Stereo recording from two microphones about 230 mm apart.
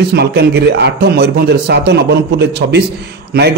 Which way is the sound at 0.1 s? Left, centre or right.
Right.